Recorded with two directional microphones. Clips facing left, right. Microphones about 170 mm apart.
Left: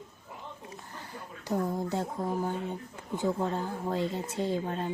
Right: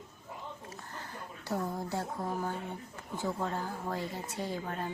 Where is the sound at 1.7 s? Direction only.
20° left (ahead or behind).